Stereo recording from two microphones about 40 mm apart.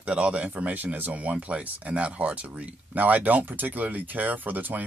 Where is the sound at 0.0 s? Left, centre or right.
Right.